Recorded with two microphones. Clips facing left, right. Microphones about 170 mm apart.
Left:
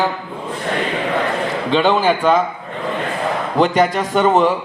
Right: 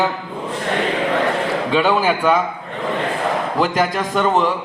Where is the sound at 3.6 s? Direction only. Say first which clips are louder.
Left 5 dB; 5° right (ahead or behind).